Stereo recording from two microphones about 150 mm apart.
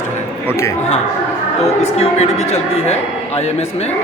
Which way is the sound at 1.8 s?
45° left (ahead or behind).